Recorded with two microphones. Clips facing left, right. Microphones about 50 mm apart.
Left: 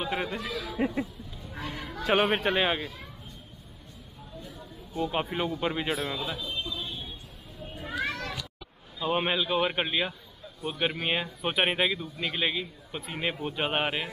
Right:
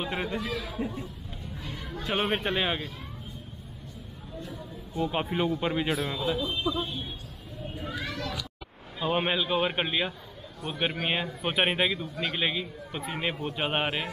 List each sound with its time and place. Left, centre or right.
0.0 s a man's voice: centre
1.5 s a sound: left
2.2 s a man's voice: centre
5.0 s a man's voice: centre
7.9 s a sound: left
9.0 s a man's voice: centre